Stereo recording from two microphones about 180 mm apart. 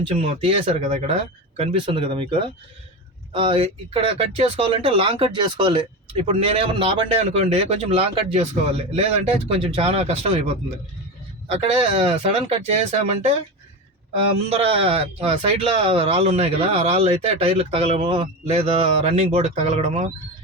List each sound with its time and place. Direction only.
0.0 s speech: 30° right (ahead or behind)
11.5 s speech: 35° right (ahead or behind)
14.5 s speech: 30° right (ahead or behind)